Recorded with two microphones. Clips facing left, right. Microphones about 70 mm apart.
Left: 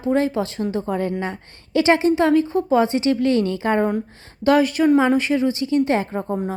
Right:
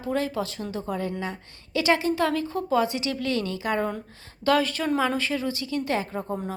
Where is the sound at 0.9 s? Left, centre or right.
Left.